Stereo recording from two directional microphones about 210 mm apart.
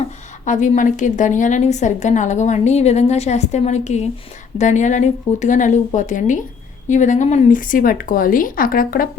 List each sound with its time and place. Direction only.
0.4 s a woman's voice: 35° left (ahead or behind)